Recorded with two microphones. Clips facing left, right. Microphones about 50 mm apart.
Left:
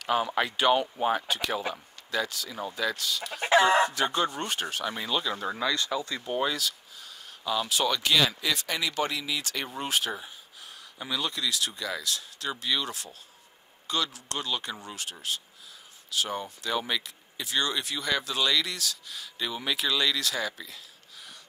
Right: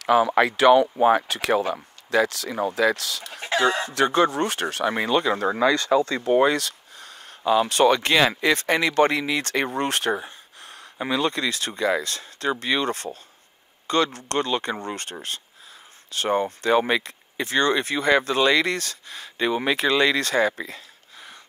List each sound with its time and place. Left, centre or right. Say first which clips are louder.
0.0 s speech: right 8 dB; right
6.2 s speech: right 10 dB; right